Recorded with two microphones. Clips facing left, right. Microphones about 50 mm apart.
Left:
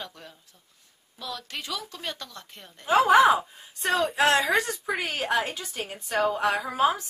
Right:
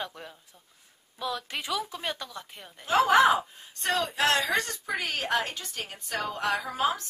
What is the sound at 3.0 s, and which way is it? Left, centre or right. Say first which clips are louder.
A woman's voice: left 2 dB; centre.